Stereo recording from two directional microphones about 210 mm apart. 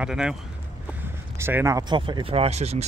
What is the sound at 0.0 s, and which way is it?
Speech, 5° right (ahead or behind).